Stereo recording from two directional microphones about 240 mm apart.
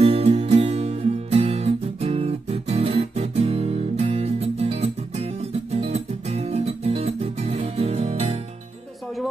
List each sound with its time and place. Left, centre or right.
0.0 s music: right